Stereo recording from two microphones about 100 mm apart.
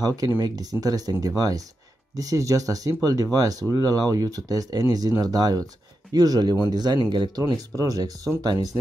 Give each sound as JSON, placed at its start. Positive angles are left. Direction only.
{"t": 0.0, "sound": "speech", "side_deg": -35}